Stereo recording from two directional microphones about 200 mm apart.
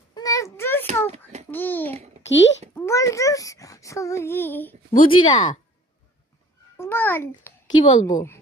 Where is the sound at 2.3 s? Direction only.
65° left (ahead or behind).